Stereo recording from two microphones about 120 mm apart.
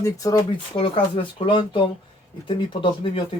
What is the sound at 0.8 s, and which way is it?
Speech, 45° left (ahead or behind).